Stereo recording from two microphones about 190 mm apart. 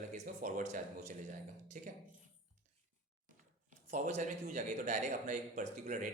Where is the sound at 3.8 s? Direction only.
40° right (ahead or behind).